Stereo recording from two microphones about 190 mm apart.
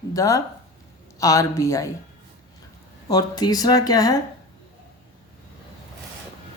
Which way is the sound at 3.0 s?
20° left (ahead or behind).